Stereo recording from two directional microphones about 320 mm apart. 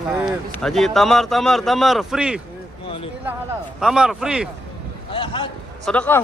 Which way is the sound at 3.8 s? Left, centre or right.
Centre.